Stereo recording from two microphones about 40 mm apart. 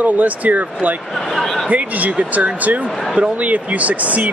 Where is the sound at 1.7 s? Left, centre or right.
Right.